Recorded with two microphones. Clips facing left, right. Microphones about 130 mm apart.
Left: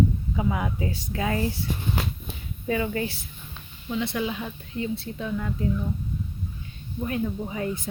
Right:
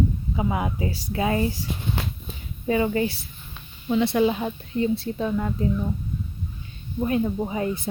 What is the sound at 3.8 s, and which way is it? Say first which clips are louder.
Speech: right 7 dB; 40° right (ahead or behind).